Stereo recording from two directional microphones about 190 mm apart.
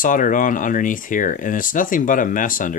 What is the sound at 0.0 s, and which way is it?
Speech, 45° left (ahead or behind).